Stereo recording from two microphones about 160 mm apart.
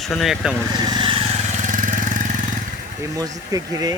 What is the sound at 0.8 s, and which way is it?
Vehicle, 30° right (ahead or behind).